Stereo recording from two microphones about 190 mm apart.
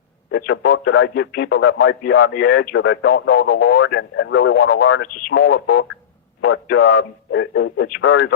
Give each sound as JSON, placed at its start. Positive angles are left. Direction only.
{"t": 0.3, "sound": "a man's voice", "side_deg": 60}
{"t": 2.7, "sound": "a man's voice", "side_deg": 60}
{"t": 4.1, "sound": "speech", "side_deg": 85}
{"t": 4.5, "sound": "a man's voice", "side_deg": 50}
{"t": 7.3, "sound": "a man's voice", "side_deg": 70}
{"t": 7.9, "sound": "a man's voice", "side_deg": 50}